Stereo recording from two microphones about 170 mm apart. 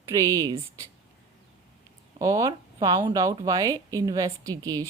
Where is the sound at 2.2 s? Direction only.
20° right (ahead or behind).